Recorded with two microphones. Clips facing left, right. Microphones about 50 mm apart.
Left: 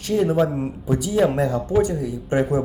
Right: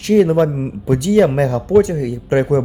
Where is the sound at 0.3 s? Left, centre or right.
Right.